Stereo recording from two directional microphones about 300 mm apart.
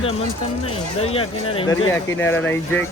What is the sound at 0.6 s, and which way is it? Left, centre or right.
Speech, centre.